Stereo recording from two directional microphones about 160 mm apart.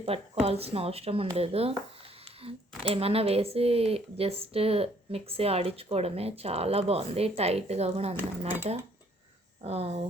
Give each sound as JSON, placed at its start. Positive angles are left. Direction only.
{"t": 0.1, "sound": "speech", "side_deg": -40}
{"t": 2.9, "sound": "speech", "side_deg": -35}
{"t": 9.6, "sound": "speech", "side_deg": -40}